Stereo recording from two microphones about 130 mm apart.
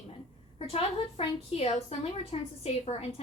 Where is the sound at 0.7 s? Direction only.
50° left (ahead or behind).